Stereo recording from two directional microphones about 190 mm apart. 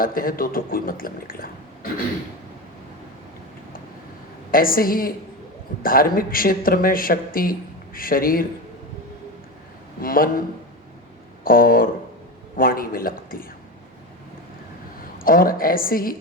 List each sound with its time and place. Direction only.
0.0 s a man's voice: 50° left (ahead or behind)
4.5 s a man's voice: 50° left (ahead or behind)
10.0 s a man's voice: 50° left (ahead or behind)
11.4 s a man's voice: 50° left (ahead or behind)
15.2 s a man's voice: 50° left (ahead or behind)